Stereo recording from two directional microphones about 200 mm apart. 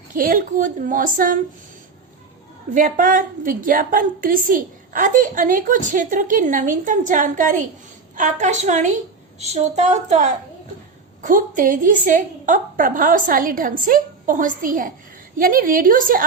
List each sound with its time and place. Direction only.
0.1 s a woman's voice: 45° right (ahead or behind)
2.7 s a woman's voice: 40° right (ahead or behind)